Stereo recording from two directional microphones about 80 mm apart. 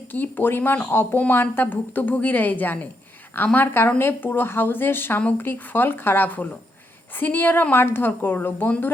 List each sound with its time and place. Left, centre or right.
0.1 s speech: left